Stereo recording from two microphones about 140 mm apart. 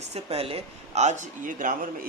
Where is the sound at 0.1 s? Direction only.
45° right (ahead or behind).